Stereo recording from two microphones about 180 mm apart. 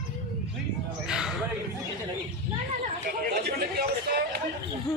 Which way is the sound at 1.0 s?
5° right (ahead or behind).